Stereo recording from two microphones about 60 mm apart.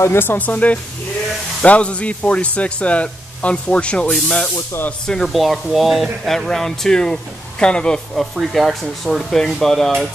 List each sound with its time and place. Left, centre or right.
0.0 s speech: left; by 5.3 s centre
5.3 s speech: centre
8.4 s speech: centre